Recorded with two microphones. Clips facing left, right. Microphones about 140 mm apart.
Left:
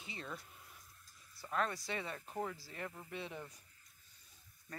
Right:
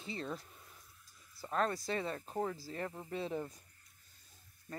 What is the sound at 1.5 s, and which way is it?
Speech, 40° right (ahead or behind).